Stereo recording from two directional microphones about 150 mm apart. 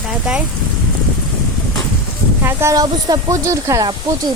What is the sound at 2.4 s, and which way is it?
Speech, 20° right (ahead or behind).